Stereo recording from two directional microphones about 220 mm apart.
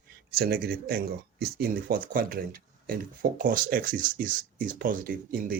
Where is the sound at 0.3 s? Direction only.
45° right (ahead or behind).